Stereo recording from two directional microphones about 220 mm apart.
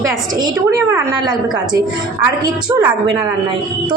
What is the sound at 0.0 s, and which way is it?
A woman's voice, 15° right (ahead or behind).